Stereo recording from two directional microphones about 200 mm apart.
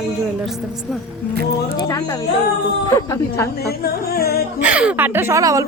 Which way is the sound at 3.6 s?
50° left (ahead or behind).